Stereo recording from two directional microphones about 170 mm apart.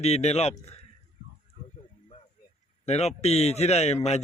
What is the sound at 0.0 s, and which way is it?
Speech, 40° left (ahead or behind).